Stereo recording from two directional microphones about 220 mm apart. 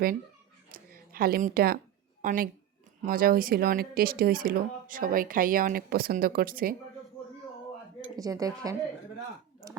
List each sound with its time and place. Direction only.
0.7 s a sound: 40° right (ahead or behind)
2.2 s speech: 40° right (ahead or behind)
8.1 s speech: 15° right (ahead or behind)